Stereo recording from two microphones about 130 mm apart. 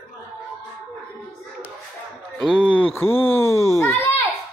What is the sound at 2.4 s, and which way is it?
Speech, 5° left (ahead or behind).